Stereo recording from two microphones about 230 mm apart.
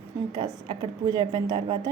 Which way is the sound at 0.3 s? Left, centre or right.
Centre.